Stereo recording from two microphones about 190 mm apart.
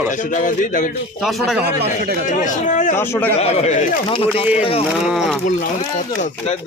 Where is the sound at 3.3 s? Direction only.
35° left (ahead or behind).